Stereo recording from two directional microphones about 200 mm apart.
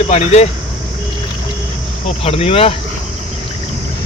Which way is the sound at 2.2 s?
30° left (ahead or behind).